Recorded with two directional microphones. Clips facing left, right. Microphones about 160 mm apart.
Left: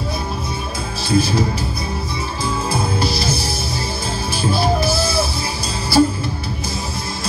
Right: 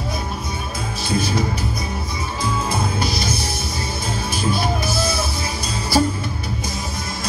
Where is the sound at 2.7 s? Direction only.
30° left (ahead or behind).